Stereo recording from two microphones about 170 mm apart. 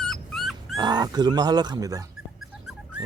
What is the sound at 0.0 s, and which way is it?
Dog, centre (ahead or behind).